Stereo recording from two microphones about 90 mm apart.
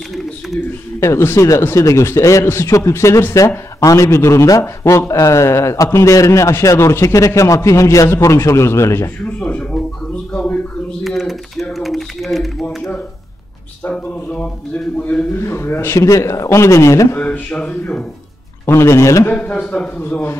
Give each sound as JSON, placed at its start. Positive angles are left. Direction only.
{"t": 0.9, "sound": "speech", "side_deg": 30}
{"t": 9.2, "sound": "a sound", "side_deg": 15}
{"t": 11.1, "sound": "typing", "side_deg": 0}
{"t": 13.8, "sound": "speech", "side_deg": 15}
{"t": 15.4, "sound": "speech", "side_deg": 30}
{"t": 17.2, "sound": "speech", "side_deg": 15}
{"t": 18.7, "sound": "speech", "side_deg": 30}
{"t": 19.4, "sound": "speech", "side_deg": 15}
{"t": 20.0, "sound": "a man's voice", "side_deg": 20}